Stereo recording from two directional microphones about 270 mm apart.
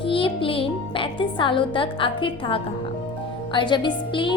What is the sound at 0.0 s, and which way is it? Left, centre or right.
Music, centre.